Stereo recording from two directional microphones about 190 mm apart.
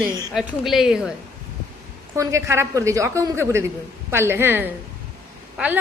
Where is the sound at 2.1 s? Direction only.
15° right (ahead or behind).